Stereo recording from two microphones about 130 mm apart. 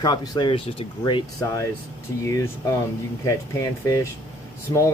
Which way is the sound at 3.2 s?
25° left (ahead or behind).